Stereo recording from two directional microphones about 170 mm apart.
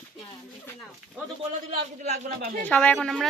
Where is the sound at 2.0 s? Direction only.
70° right (ahead or behind).